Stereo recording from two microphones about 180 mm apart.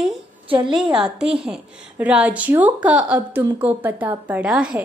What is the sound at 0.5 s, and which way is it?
Speech, 25° right (ahead or behind).